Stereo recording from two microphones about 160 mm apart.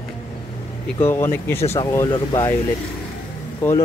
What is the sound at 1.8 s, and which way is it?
Speech, 20° left (ahead or behind).